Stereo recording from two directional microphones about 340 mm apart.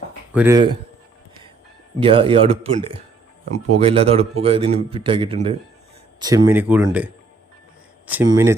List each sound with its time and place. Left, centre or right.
0.3 s a man's voice: centre
2.0 s a man's voice: centre
8.0 s a man's voice: centre